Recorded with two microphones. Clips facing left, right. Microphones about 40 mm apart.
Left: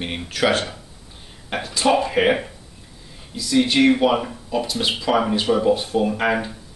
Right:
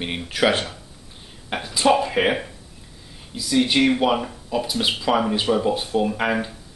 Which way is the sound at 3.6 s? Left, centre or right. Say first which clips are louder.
Left 2 dB; centre.